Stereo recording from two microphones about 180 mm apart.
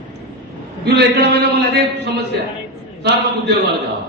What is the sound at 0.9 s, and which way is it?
A man's voice, 65° right (ahead or behind).